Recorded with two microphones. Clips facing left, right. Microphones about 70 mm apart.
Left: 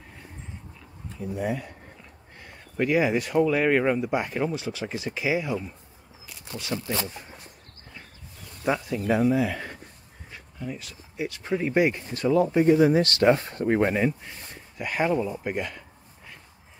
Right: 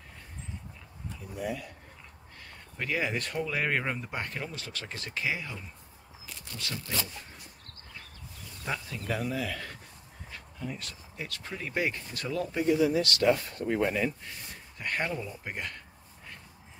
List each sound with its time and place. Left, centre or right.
1.4 s speech: left
2.4 s speech: centre
6.6 s speech: left
8.6 s speech: centre
10.3 s a sound: centre
11.1 s speech: centre
12.5 s speech: left
14.8 s speech: centre